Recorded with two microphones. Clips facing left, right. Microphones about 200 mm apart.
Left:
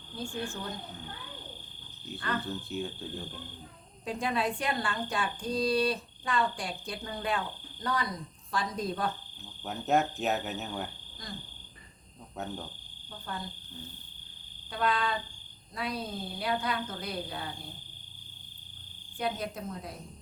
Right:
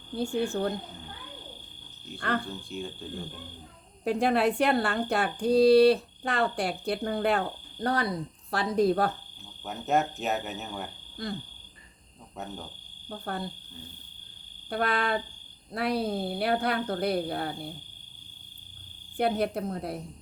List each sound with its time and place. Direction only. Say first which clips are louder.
0.2 s a woman's voice: right 9 dB; 65° right (ahead or behind)
2.1 s a woman's voice: right 4 dB; 60° right (ahead or behind)
2.4 s speech: left 1 dB; centre (ahead or behind)
4.0 s a woman's voice: right 7 dB; 65° right (ahead or behind)
9.6 s speech: right 1 dB; centre (ahead or behind)
13.1 s a woman's voice: right 6 dB; 60° right (ahead or behind)
14.7 s a woman's voice: right 3 dB; 65° right (ahead or behind)
19.4 s a woman's voice: right 8 dB; 65° right (ahead or behind)